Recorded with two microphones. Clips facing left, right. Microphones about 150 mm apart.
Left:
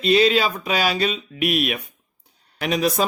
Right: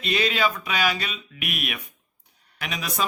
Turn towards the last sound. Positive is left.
turn(degrees=35)  # may be behind; listen again after turning